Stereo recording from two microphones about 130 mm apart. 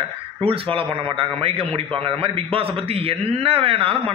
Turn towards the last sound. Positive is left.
turn(degrees=-45)  # may be behind; listen again after turning